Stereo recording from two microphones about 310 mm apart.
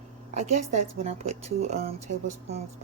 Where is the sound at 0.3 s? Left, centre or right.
Right.